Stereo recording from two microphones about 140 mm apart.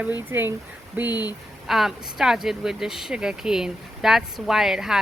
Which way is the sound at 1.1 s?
30° left (ahead or behind).